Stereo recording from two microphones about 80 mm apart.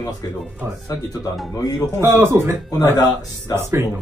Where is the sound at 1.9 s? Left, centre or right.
Right.